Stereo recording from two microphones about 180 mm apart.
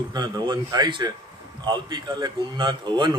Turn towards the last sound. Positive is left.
turn(degrees=-25)  # may be behind; listen again after turning